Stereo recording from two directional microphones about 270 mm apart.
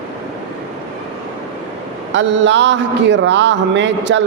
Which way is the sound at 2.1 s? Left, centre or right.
Right.